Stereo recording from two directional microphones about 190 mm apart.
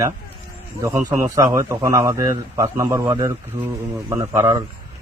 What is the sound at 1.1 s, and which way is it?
A man's voice, 15° right (ahead or behind).